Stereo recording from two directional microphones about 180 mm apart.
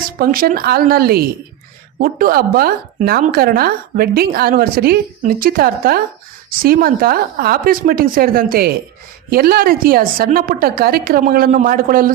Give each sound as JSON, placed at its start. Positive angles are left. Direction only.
{"t": 0.2, "sound": "speech", "side_deg": -55}